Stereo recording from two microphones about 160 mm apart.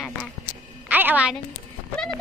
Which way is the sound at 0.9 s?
10° right (ahead or behind).